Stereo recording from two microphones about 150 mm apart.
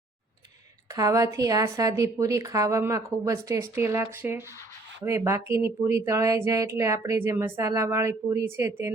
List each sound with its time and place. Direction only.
0.9 s speech: 20° right (ahead or behind)